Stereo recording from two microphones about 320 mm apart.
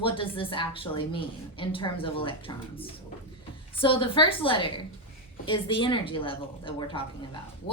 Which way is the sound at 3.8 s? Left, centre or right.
Centre.